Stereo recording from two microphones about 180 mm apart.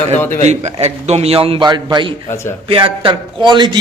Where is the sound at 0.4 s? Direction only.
35° right (ahead or behind).